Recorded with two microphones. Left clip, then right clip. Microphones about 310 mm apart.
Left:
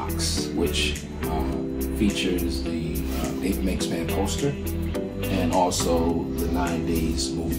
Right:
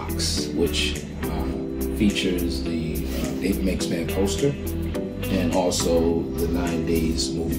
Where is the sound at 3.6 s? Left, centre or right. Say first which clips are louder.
Right 1 dB; centre.